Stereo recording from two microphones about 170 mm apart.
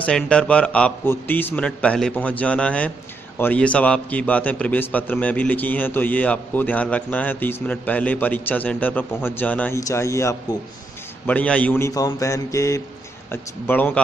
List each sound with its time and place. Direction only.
0.0 s a man's voice: 5° left (ahead or behind)